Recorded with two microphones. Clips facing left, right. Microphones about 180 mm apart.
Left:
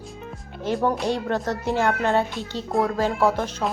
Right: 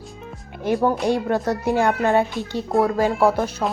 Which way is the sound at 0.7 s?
5° right (ahead or behind).